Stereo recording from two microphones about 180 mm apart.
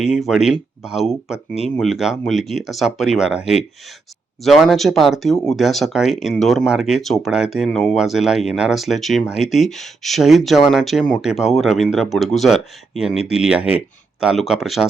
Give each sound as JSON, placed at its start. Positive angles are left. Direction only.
{"t": 0.0, "sound": "speech", "side_deg": 0}